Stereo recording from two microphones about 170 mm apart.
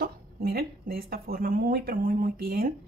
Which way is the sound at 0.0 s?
60° right (ahead or behind).